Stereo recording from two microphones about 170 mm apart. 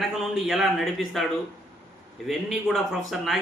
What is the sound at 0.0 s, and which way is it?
Speech, centre (ahead or behind).